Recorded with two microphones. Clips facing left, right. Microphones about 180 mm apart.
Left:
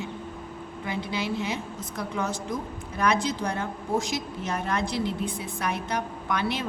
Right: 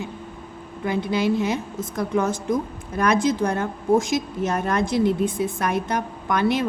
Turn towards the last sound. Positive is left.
turn(degrees=-50)  # may be behind; listen again after turning